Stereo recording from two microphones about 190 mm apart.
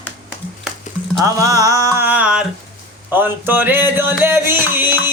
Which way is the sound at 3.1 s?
10° right (ahead or behind).